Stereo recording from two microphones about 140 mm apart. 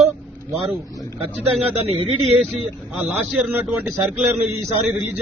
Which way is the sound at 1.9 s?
45° right (ahead or behind).